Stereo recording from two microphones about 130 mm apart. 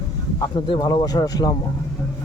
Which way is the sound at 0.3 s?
35° left (ahead or behind).